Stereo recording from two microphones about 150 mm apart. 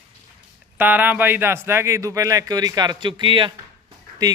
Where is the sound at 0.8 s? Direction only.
10° right (ahead or behind).